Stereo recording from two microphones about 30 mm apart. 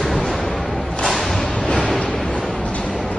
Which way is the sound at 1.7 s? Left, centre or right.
Left.